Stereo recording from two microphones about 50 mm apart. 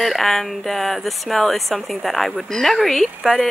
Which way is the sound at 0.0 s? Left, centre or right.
Centre.